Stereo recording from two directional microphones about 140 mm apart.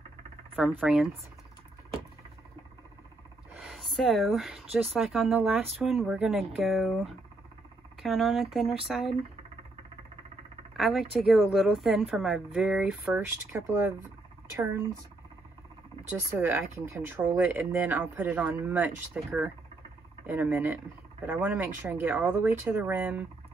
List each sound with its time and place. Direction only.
0.7 s speech: 5° right (ahead or behind)
3.5 s a sound: centre (ahead or behind)
4.8 s speech: centre (ahead or behind)
10.8 s speech: centre (ahead or behind)
13.1 s speech: 15° right (ahead or behind)
16.0 s speech: 15° right (ahead or behind)